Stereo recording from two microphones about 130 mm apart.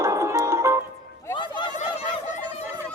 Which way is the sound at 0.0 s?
25° right (ahead or behind).